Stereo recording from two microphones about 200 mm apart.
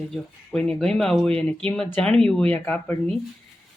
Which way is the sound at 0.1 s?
5° left (ahead or behind).